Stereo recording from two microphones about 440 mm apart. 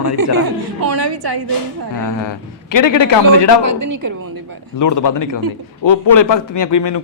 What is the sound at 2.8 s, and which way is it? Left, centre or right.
Speech, left.